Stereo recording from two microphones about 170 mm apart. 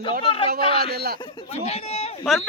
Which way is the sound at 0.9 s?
70° right (ahead or behind).